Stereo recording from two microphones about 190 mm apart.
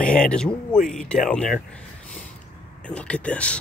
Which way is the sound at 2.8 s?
5° left (ahead or behind).